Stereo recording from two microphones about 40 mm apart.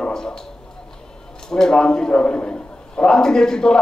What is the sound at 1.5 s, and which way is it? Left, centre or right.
A man's voice, centre.